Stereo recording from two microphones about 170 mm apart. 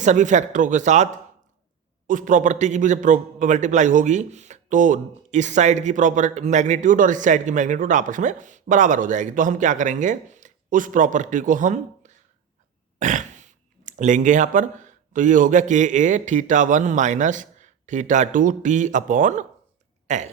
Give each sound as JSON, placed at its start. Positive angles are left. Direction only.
{"t": 0.0, "sound": "a man's voice", "side_deg": -45}